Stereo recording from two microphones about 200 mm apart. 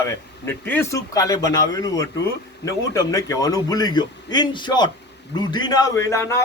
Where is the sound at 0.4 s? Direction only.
10° left (ahead or behind).